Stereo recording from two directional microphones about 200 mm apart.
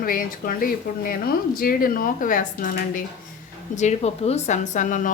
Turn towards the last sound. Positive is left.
turn(degrees=40)  # may be behind; listen again after turning